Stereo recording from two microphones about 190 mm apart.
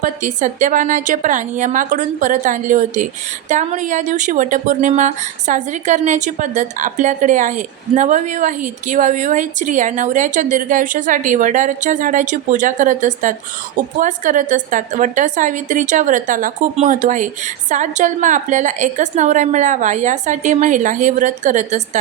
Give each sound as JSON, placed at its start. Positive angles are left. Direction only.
{"t": 0.0, "sound": "a woman's voice", "side_deg": -40}